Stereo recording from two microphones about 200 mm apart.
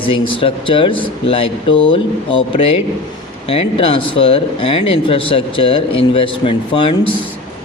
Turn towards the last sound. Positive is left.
turn(degrees=25)  # may be behind; listen again after turning